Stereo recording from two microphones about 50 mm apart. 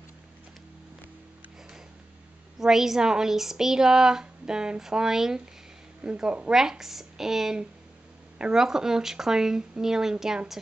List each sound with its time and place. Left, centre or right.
2.6 s a woman's voice: centre